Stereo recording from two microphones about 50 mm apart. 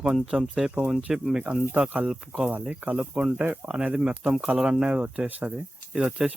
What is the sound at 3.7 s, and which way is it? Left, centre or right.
Speech, centre.